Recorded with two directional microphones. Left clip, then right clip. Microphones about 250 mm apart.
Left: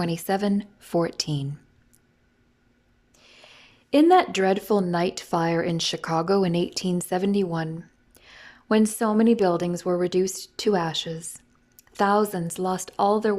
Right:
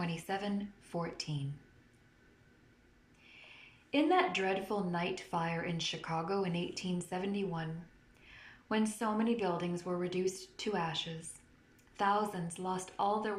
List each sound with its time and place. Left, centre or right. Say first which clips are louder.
0.0 s a woman's voice: left 13 dB; left
3.2 s a woman's voice: left 5 dB; left